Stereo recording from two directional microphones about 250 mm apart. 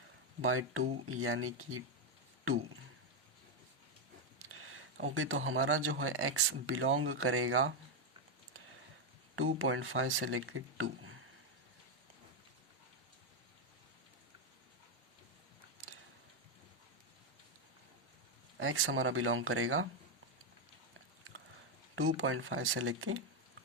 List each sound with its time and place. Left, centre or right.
0.4 s speech: right
4.4 s speech: right
9.3 s speech: right
18.5 s speech: right
21.9 s speech: right